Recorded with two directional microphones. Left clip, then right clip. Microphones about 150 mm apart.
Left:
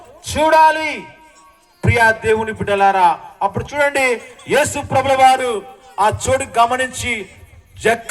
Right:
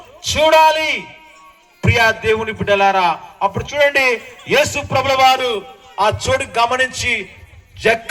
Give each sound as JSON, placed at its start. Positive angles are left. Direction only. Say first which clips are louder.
{"t": 0.2, "sound": "a man's voice", "louder": "even", "side_deg": -20}